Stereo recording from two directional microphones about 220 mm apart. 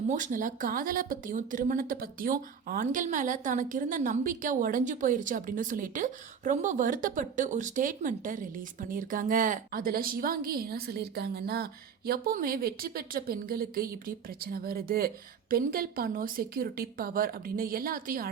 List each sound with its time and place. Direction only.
0.1 s a woman's voice: 35° right (ahead or behind)